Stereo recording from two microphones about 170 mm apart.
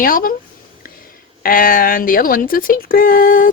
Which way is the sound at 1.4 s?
55° left (ahead or behind).